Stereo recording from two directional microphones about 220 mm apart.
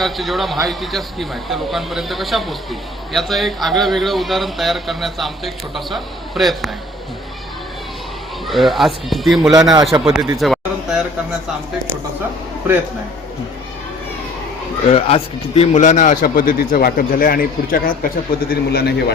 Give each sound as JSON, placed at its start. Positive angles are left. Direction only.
{"t": 0.0, "sound": "speech", "side_deg": 0}
{"t": 8.4, "sound": "speech", "side_deg": 0}
{"t": 9.4, "sound": "speech", "side_deg": -15}
{"t": 9.8, "sound": "speech", "side_deg": 0}
{"t": 14.8, "sound": "speech", "side_deg": 25}